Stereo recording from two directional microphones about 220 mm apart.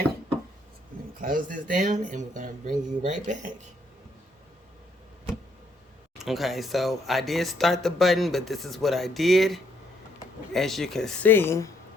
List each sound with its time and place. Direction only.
1.2 s speech: 40° right (ahead or behind)
6.1 s speech: centre (ahead or behind)